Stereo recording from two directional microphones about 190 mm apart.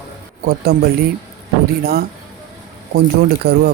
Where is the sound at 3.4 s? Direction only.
55° right (ahead or behind).